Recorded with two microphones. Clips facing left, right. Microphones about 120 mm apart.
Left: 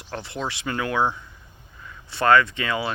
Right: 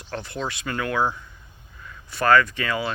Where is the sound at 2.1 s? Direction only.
25° left (ahead or behind).